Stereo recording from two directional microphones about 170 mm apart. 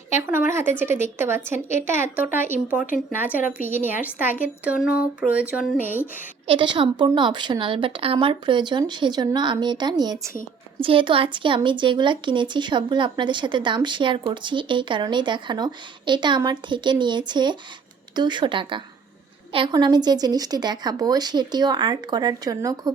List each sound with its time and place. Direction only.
0.1 s a woman's voice: 15° right (ahead or behind)
2.8 s speech: 50° left (ahead or behind)
3.2 s a woman's voice: 10° right (ahead or behind)
6.5 s speech: 30° right (ahead or behind)